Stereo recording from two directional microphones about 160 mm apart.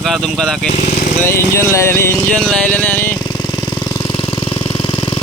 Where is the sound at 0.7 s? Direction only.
50° left (ahead or behind).